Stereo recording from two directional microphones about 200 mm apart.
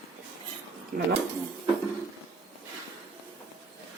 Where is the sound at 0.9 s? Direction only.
45° right (ahead or behind).